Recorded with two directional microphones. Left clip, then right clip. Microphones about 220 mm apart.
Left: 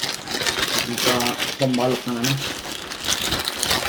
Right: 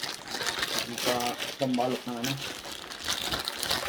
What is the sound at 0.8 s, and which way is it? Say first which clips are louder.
Speech: left 8 dB; 10° left (ahead or behind).